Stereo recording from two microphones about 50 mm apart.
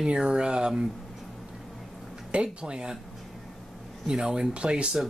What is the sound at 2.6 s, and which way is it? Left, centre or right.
Speech, centre.